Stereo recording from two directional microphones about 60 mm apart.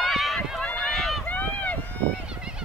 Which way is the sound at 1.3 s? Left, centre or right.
Left.